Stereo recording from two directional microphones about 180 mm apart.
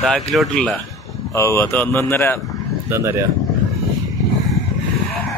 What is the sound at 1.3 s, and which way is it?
Speech, 15° left (ahead or behind).